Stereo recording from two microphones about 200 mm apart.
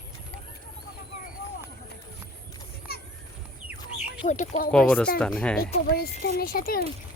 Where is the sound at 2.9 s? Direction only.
50° left (ahead or behind).